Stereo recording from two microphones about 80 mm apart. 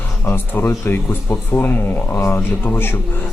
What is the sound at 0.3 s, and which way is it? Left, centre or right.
Speech, left.